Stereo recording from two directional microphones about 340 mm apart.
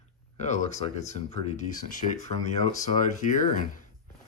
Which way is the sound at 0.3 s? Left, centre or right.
Left.